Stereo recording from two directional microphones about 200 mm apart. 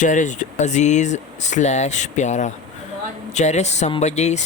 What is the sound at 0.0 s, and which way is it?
Speech, 40° left (ahead or behind).